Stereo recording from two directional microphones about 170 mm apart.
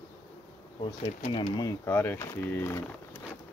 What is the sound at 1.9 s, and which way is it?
Speech, 15° left (ahead or behind).